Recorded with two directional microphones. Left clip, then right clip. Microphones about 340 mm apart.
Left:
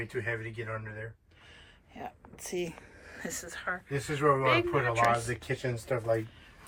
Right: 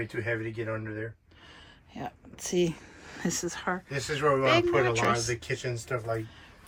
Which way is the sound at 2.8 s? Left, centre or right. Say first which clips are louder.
Right 5 dB; centre.